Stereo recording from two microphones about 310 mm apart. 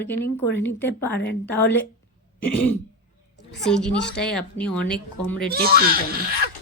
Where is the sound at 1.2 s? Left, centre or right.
Left.